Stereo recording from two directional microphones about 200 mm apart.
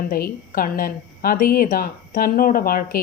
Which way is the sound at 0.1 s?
45° left (ahead or behind).